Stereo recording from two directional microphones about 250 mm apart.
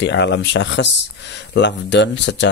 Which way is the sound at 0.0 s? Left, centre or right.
Left.